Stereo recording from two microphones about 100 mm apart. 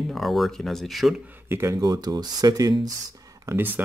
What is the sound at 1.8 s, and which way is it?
Speech, 40° right (ahead or behind).